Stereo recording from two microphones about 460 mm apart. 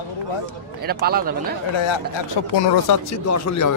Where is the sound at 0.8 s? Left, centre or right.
Centre.